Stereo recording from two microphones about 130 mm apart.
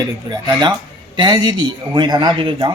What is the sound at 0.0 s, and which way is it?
Speech, 30° right (ahead or behind).